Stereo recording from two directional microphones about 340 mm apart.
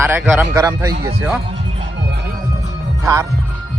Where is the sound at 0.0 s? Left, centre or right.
Centre.